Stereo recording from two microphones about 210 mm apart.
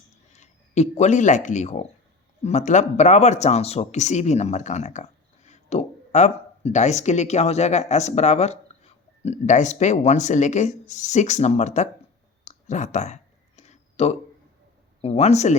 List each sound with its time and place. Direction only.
0.3 s a man's voice: 35° left (ahead or behind)
13.6 s a sound: 30° left (ahead or behind)
15.0 s a man's voice: 30° left (ahead or behind)